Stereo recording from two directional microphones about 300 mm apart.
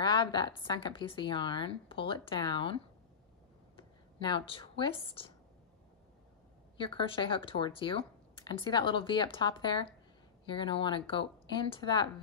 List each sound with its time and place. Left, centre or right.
0.0 s speech: centre
6.8 s speech: centre